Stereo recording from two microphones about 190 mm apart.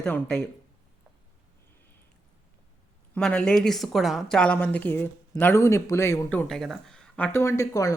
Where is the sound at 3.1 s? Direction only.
5° left (ahead or behind).